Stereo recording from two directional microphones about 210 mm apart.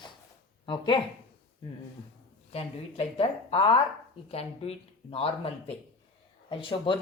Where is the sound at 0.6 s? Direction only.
25° left (ahead or behind).